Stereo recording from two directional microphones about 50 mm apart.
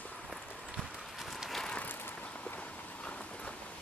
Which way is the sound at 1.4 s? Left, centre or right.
Centre.